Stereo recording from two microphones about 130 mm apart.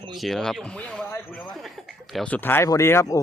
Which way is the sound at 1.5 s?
Centre (ahead or behind).